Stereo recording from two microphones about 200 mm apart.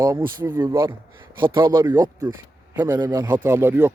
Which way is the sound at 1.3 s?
25° right (ahead or behind).